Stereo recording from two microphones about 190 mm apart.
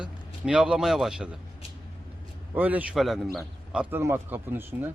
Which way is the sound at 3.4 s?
15° right (ahead or behind).